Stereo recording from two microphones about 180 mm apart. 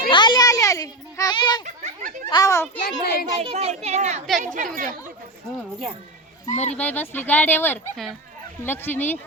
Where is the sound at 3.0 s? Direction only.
60° left (ahead or behind).